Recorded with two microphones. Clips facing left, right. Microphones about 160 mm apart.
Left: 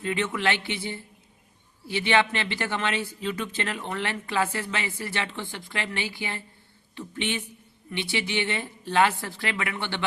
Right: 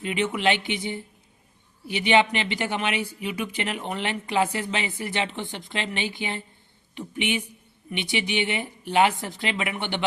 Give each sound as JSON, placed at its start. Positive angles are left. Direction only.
{"t": 0.0, "sound": "speech", "side_deg": -15}